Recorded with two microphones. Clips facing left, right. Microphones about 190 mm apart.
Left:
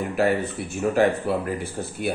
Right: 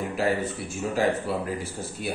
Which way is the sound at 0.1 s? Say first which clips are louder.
Left 5 dB; 60° left (ahead or behind).